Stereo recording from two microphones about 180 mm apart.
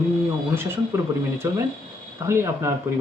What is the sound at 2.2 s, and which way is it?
Speech, 15° right (ahead or behind).